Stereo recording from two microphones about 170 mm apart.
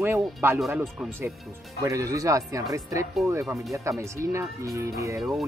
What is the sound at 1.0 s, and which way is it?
Speech, centre (ahead or behind).